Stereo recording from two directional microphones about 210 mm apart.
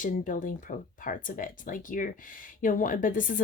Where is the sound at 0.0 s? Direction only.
40° left (ahead or behind).